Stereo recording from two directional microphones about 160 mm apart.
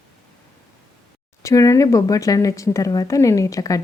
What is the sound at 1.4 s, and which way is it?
Speech, 20° left (ahead or behind).